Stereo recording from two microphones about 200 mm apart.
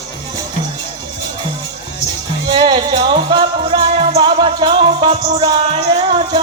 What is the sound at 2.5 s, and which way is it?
Music, 20° right (ahead or behind).